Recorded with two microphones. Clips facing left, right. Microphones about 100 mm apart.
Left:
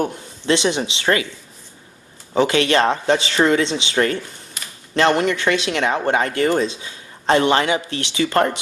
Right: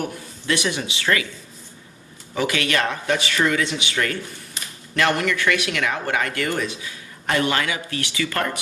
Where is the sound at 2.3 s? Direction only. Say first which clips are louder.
Left 6 dB; 30° left (ahead or behind).